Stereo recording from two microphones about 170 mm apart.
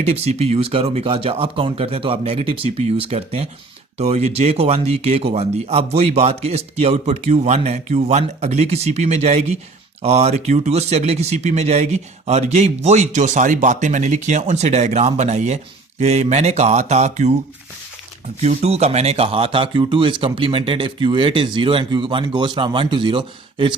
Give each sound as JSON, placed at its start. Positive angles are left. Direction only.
{"t": 0.0, "sound": "speech", "side_deg": -40}
{"t": 18.4, "sound": "speech", "side_deg": -40}